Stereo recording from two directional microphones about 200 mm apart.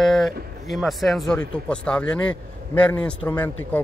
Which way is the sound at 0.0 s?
Centre (ahead or behind).